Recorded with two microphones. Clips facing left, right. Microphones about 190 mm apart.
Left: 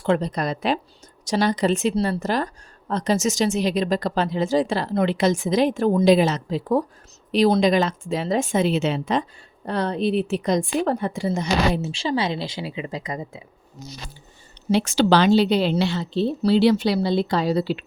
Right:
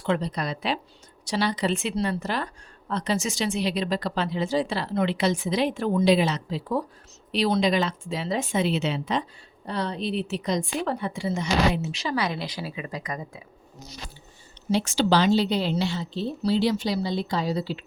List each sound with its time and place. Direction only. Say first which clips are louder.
0.0 s a woman's voice: left 5 dB; 45° left (ahead or behind); by 13.4 s 25° left (ahead or behind)
14.7 s a woman's voice: left 4 dB; 70° left (ahead or behind)